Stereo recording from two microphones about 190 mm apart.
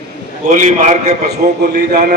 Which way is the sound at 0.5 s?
40° right (ahead or behind).